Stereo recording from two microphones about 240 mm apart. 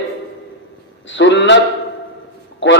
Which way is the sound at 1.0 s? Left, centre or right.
Left.